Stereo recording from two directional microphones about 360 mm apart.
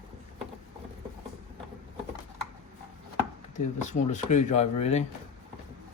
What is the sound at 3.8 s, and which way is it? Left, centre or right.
Speech, centre.